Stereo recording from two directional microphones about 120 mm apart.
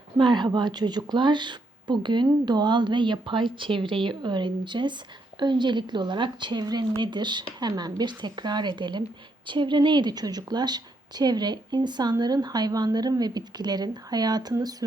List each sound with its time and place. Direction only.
0.2 s a woman's voice: 40° right (ahead or behind)